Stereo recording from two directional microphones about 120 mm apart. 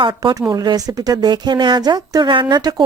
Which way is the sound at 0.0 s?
35° right (ahead or behind).